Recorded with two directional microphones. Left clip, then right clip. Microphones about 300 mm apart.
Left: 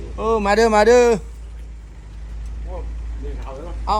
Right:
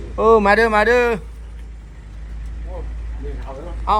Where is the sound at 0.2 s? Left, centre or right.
Centre.